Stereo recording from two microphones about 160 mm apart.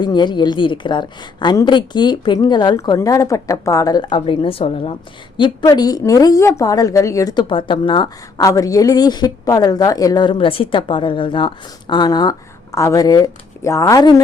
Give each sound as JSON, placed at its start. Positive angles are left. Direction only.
{"t": 0.0, "sound": "a woman's voice", "side_deg": 25}
{"t": 5.4, "sound": "a woman's voice", "side_deg": 25}